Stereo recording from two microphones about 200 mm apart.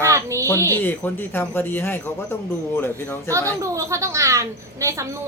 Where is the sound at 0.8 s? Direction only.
10° left (ahead or behind).